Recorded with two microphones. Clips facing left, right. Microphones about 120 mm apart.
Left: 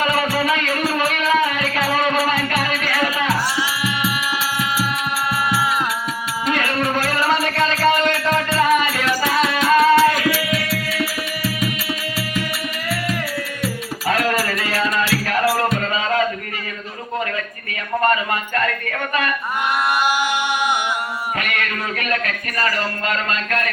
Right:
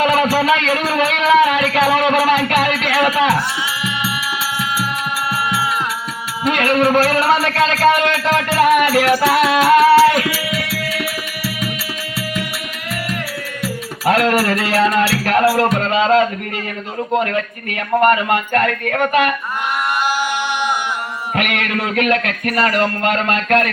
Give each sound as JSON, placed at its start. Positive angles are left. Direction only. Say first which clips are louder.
{"t": 0.0, "sound": "music", "louder": "right 5 dB", "side_deg": -80}
{"t": 6.4, "sound": "music", "louder": "right 7 dB", "side_deg": -70}
{"t": 14.0, "sound": "music", "louder": "right 5 dB", "side_deg": -65}
{"t": 17.2, "sound": "speech", "louder": "right 5 dB", "side_deg": -70}
{"t": 21.3, "sound": "a man's voice", "louder": "right 5 dB", "side_deg": -70}